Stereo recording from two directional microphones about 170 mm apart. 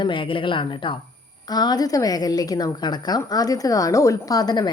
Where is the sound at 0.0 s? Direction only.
30° left (ahead or behind).